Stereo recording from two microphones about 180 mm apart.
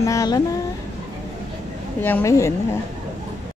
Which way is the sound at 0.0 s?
20° left (ahead or behind).